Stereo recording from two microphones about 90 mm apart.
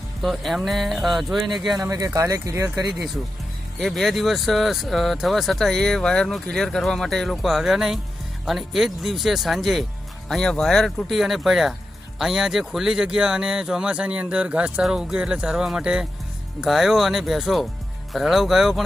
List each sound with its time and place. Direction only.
0.2 s speech: centre (ahead or behind)
1.8 s speech: 35° right (ahead or behind)
3.8 s speech: 5° left (ahead or behind)